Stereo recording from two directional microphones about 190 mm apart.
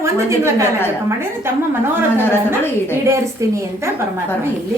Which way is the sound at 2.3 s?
10° left (ahead or behind).